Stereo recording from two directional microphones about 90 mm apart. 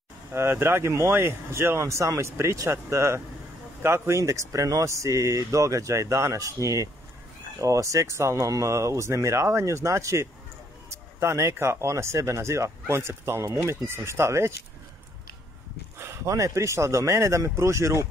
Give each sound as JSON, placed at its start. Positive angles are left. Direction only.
{"t": 0.3, "sound": "speech", "side_deg": -25}
{"t": 16.0, "sound": "speech", "side_deg": -35}